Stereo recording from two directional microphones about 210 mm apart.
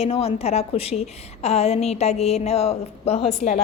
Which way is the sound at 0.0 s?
30° left (ahead or behind).